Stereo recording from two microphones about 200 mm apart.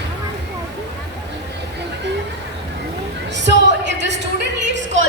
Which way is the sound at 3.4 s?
60° right (ahead or behind).